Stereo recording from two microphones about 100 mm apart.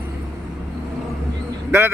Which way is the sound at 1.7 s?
25° right (ahead or behind).